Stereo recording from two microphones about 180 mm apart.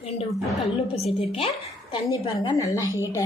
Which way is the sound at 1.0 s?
35° left (ahead or behind).